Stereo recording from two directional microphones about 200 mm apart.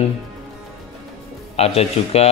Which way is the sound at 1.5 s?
30° left (ahead or behind).